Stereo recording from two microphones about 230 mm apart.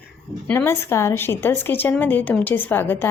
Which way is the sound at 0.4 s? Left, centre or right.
Centre.